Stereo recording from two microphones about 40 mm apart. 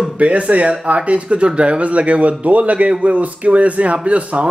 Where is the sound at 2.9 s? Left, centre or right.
Right.